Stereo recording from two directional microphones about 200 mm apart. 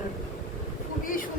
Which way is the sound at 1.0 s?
45° left (ahead or behind).